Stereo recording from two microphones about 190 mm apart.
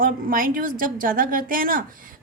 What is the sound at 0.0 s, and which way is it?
A woman's voice, 50° right (ahead or behind).